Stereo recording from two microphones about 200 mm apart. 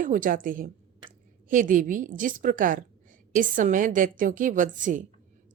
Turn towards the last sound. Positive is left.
turn(degrees=-40)  # may be behind; listen again after turning